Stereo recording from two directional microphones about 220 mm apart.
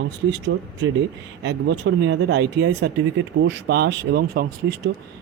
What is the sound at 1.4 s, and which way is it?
Speech, 50° right (ahead or behind).